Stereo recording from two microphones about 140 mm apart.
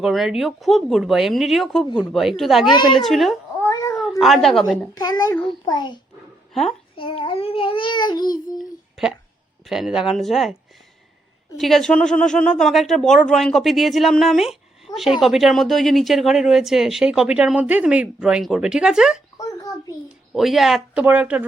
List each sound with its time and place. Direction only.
0.0 s speech: centre (ahead or behind)
3.6 s cat: 20° left (ahead or behind)
4.2 s speech: centre (ahead or behind)
4.9 s a child's voice: 25° left (ahead or behind)
6.5 s a child's voice: centre (ahead or behind)
6.9 s child singing: 40° left (ahead or behind)
8.5 s a sound: 5° right (ahead or behind)
9.6 s speech: 5° right (ahead or behind)
11.5 s speech: centre (ahead or behind)
19.4 s a sound: 25° left (ahead or behind)
20.3 s speech: centre (ahead or behind)